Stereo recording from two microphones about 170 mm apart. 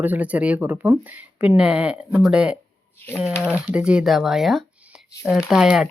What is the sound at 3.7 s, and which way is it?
Speech, 5° right (ahead or behind).